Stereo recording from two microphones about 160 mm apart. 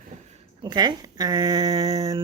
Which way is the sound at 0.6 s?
25° right (ahead or behind).